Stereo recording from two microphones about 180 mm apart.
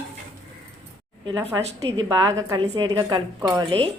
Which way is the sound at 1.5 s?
15° right (ahead or behind).